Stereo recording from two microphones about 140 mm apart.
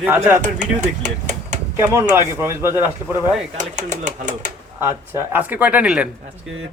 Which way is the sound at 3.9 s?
60° right (ahead or behind).